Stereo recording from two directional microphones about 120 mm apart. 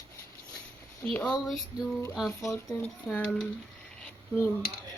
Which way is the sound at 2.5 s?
Centre (ahead or behind).